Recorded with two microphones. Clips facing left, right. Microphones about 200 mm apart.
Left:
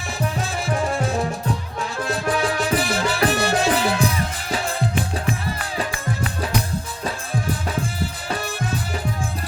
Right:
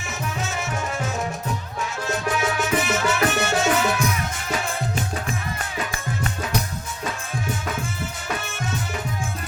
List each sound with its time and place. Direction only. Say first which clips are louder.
0.5 s music: left 5 dB; 35° left (ahead or behind)